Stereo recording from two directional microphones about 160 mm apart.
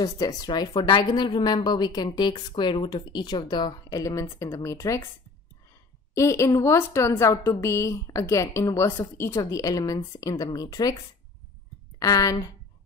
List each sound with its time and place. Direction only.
0.0 s a woman's voice: 25° left (ahead or behind)
6.1 s a woman's voice: 20° left (ahead or behind)
12.0 s a woman's voice: 25° left (ahead or behind)